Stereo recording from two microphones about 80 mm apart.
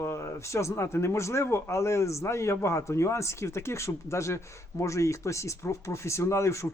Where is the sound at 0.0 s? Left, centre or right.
Left.